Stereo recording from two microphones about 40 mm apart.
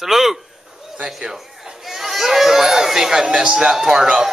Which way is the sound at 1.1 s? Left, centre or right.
Centre.